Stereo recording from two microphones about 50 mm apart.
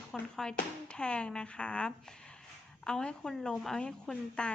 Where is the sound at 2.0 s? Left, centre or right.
Centre.